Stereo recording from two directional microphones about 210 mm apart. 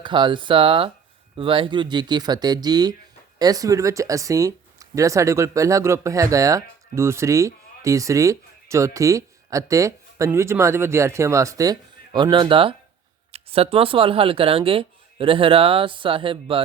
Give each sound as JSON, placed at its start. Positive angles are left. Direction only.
{"t": 0.0, "sound": "speech", "side_deg": -25}